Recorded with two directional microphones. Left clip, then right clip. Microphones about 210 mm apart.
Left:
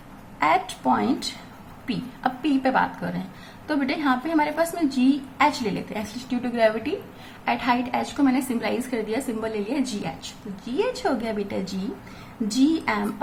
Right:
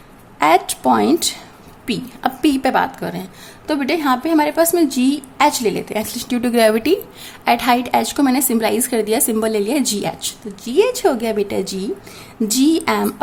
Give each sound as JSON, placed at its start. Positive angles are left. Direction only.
{"t": 0.3, "sound": "a woman's voice", "side_deg": -45}